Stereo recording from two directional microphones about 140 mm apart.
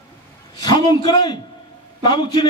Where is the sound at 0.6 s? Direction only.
30° left (ahead or behind).